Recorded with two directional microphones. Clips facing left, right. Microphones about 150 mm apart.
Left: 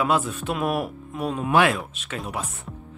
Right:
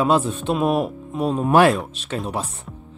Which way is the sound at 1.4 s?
40° right (ahead or behind).